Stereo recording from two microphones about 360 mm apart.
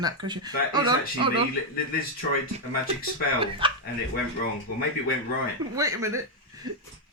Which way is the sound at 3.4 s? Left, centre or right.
Centre.